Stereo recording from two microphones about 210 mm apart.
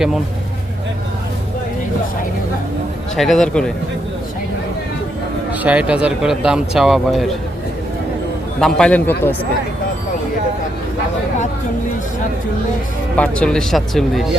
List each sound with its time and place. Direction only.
3.2 s speech: centre (ahead or behind)
5.6 s speech: 5° right (ahead or behind)
8.6 s a man's voice: 5° left (ahead or behind)
13.1 s speech: 5° left (ahead or behind)